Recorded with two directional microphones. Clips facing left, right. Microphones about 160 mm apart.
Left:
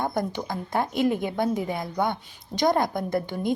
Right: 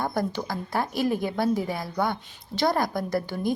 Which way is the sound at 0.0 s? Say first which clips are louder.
Even; 20° left (ahead or behind).